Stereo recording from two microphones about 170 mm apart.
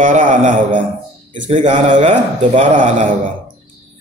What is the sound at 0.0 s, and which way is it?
Mantra, 50° right (ahead or behind).